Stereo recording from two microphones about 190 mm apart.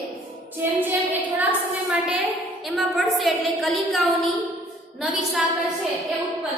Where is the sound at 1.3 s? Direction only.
10° right (ahead or behind).